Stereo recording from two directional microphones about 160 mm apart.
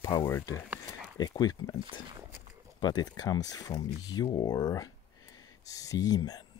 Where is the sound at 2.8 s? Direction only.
25° left (ahead or behind).